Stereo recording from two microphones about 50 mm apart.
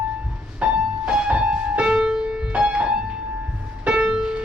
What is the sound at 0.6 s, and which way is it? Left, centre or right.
Music, right.